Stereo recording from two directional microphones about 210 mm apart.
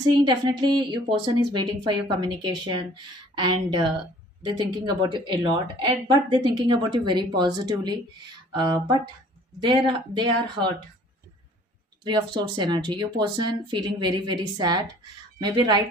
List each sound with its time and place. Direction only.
0.1 s a woman's voice: 20° right (ahead or behind)
12.0 s a woman's voice: 20° right (ahead or behind)